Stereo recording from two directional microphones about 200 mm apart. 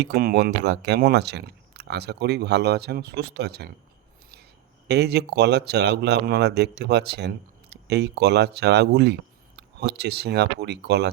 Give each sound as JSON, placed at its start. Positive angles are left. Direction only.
{"t": 0.0, "sound": "speech", "side_deg": -50}
{"t": 4.9, "sound": "speech", "side_deg": -55}